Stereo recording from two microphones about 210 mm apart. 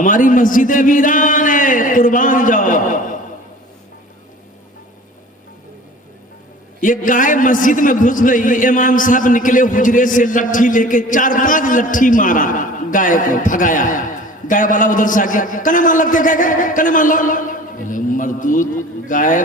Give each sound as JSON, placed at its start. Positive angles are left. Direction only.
{"t": 0.0, "sound": "a man's voice", "side_deg": 40}
{"t": 6.8, "sound": "a man's voice", "side_deg": 40}